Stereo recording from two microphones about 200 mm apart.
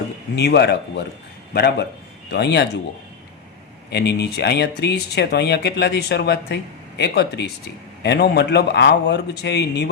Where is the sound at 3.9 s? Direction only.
55° left (ahead or behind).